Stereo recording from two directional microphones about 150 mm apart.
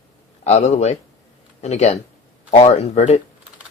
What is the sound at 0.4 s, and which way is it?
Speech, 50° left (ahead or behind).